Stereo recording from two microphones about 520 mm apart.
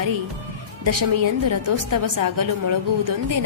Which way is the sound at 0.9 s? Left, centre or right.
Right.